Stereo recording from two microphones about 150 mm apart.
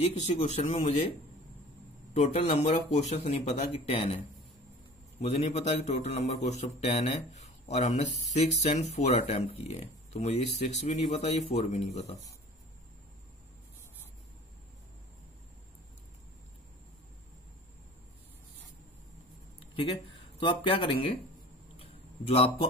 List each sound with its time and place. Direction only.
0.0 s speech: 50° left (ahead or behind)
2.1 s speech: 45° left (ahead or behind)
5.2 s speech: 45° left (ahead or behind)
19.6 s speech: 35° left (ahead or behind)
21.7 s a sound: 40° left (ahead or behind)